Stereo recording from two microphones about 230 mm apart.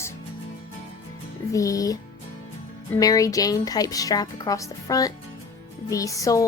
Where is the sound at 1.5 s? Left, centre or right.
Centre.